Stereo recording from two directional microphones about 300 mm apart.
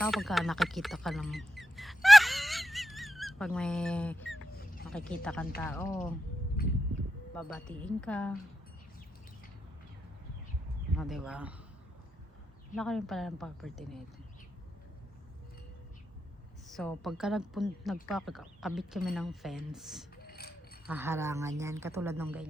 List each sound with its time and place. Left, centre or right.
0.0 s speech: centre
4.3 s rodents: left
4.9 s a woman's voice: centre
6.6 s a sound: left
7.3 s a woman's voice: centre
10.9 s a woman's voice: centre
12.7 s a woman's voice: centre
16.7 s a woman's voice: centre
20.2 s mechanisms: left
20.8 s a woman's voice: centre